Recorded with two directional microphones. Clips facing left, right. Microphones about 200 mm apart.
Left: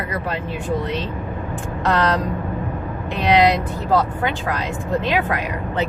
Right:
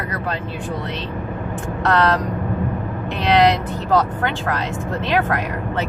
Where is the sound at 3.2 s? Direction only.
15° left (ahead or behind).